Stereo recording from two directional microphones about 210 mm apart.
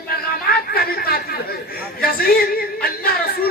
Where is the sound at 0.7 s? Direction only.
45° left (ahead or behind).